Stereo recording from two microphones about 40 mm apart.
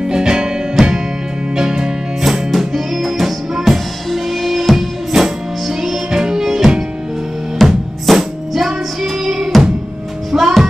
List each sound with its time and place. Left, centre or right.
0.0 s music: centre
0.8 s music: centre
1.6 s music: centre
2.5 s music: centre
7.6 s music: centre
10.3 s music: centre